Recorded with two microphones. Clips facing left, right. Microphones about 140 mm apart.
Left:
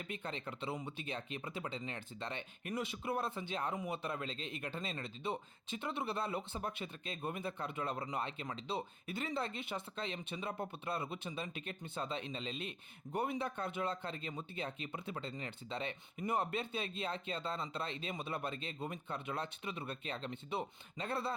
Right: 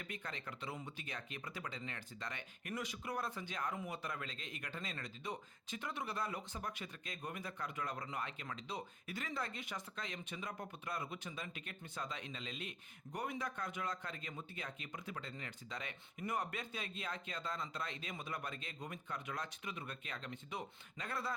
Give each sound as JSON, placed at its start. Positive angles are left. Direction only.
{"t": 0.1, "sound": "speech", "side_deg": 25}